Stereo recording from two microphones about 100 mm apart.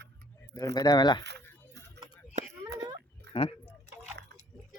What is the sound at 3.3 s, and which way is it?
Speech, 65° left (ahead or behind).